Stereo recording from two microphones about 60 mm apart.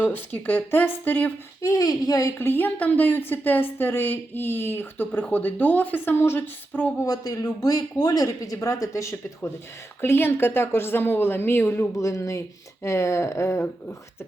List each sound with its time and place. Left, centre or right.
0.0 s speech: left
1.6 s speech: left
2.4 s speech: left
7.0 s speech: left
8.6 s speech: left
10.0 s speech: left
11.9 s speech: left